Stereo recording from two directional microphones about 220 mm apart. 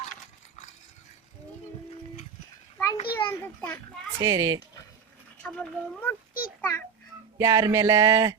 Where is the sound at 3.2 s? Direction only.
10° left (ahead or behind).